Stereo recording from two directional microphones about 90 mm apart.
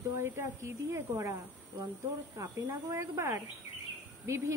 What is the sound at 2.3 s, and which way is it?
A woman's voice, 40° right (ahead or behind).